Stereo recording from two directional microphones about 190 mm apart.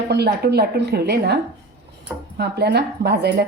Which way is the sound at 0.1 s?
60° right (ahead or behind).